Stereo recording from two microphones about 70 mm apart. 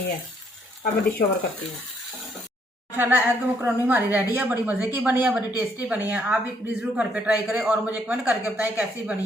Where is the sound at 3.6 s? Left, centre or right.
Right.